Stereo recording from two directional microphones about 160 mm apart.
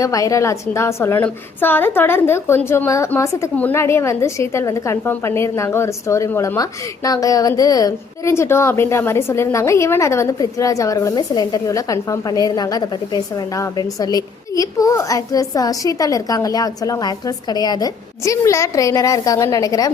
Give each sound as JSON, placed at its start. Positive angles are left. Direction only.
{"t": 0.0, "sound": "a woman's voice", "side_deg": 20}